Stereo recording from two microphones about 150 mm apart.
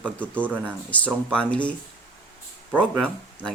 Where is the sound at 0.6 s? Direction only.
10° left (ahead or behind).